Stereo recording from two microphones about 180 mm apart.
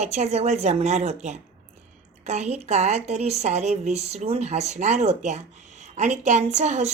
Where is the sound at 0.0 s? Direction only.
40° right (ahead or behind).